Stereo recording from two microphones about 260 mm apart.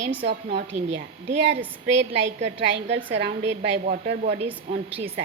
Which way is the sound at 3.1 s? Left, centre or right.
Right.